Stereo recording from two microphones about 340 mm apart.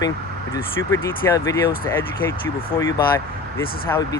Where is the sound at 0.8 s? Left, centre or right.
Left.